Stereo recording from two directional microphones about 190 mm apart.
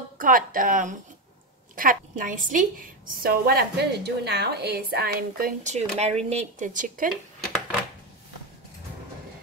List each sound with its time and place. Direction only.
0.2 s a woman's voice: 45° right (ahead or behind)
5.6 s speech: 35° right (ahead or behind)